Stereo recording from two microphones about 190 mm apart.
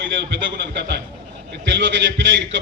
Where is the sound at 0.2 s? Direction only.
65° right (ahead or behind).